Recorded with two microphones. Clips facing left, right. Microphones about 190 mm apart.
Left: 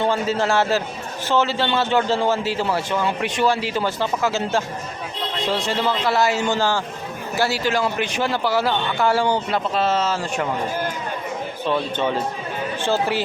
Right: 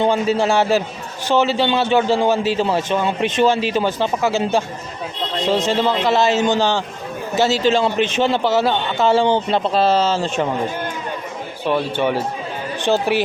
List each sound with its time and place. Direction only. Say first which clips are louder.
0.0 s a man's voice: right 4 dB; 15° right (ahead or behind)
11.6 s a man's voice: right 4 dB; 15° right (ahead or behind)